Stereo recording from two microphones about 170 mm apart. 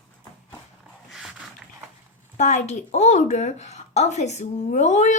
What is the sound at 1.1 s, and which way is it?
Dog, centre (ahead or behind).